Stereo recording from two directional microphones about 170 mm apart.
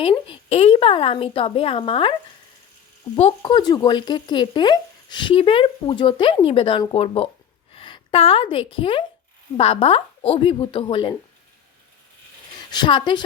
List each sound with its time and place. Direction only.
0.0 s speech: 30° left (ahead or behind)
3.2 s speech: 40° left (ahead or behind)
3.5 s a woman's voice: 25° left (ahead or behind)
12.5 s a woman's voice: 25° left (ahead or behind)